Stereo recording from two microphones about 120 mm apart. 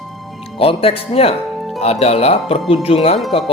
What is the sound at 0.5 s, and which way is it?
Speech, 50° left (ahead or behind).